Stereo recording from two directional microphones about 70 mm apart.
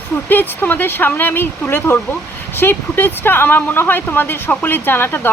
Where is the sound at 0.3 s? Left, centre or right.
Left.